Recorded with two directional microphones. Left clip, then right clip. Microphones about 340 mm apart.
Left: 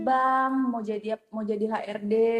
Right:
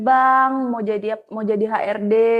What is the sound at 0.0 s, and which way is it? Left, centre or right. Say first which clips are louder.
A woman's voice: right 9 dB; right.